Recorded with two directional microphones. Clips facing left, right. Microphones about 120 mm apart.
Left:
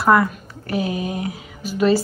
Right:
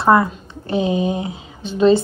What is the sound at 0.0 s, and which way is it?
Speech, 25° right (ahead or behind).